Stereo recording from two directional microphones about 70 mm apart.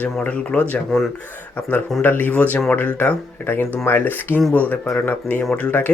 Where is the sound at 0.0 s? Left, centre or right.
Centre.